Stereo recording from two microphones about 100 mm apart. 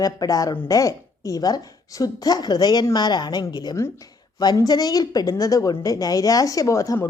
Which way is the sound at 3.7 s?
30° left (ahead or behind).